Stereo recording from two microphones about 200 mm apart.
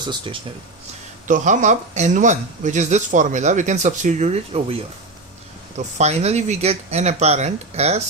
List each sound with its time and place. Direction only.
0.0 s speech: 20° right (ahead or behind)
1.3 s speech: 40° right (ahead or behind)